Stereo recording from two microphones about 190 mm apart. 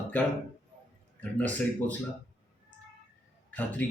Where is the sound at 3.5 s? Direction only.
10° left (ahead or behind).